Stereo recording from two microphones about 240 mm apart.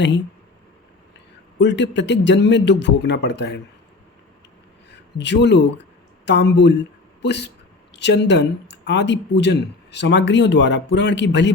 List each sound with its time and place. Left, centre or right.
1.5 s speech: left
5.1 s speech: left